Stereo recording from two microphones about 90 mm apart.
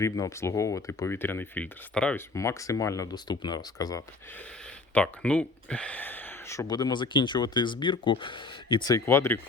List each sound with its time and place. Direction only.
0.0 s speech: 30° left (ahead or behind); by 2.1 s 15° left (ahead or behind)
2.1 s speech: 35° left (ahead or behind)
3.2 s speech: 55° left (ahead or behind)
4.9 s speech: 15° left (ahead or behind)
6.7 s speech: 50° left (ahead or behind); by 8.8 s 65° left (ahead or behind)
9.0 s speech: 30° left (ahead or behind)